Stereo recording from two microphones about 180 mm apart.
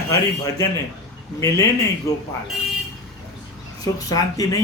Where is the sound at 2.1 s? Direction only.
20° left (ahead or behind).